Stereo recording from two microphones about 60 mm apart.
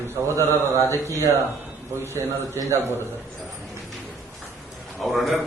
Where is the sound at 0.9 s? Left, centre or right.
Right.